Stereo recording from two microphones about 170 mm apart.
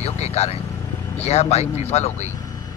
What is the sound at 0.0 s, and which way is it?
Vehicle, 40° left (ahead or behind).